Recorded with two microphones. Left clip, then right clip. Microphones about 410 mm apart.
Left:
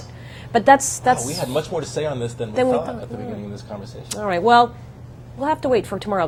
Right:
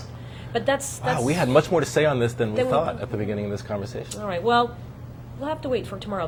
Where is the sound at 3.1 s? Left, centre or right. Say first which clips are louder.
Right 4 dB; right.